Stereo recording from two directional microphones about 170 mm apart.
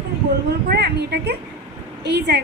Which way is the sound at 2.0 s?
90° right.